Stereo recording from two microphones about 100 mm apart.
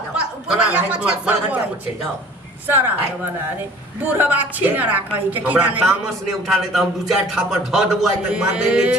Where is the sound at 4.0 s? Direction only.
20° right (ahead or behind).